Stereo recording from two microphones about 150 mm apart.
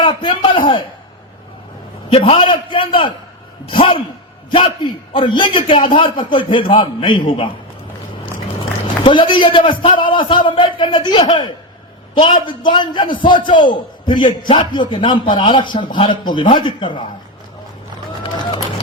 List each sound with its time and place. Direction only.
0.0 s a man's voice: 30° left (ahead or behind)
2.0 s a man's voice: 40° left (ahead or behind)
9.0 s a man's voice: 30° left (ahead or behind)
18.2 s run: 30° left (ahead or behind)